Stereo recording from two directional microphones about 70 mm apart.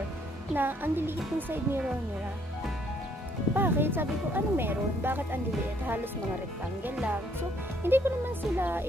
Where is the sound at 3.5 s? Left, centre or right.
Right.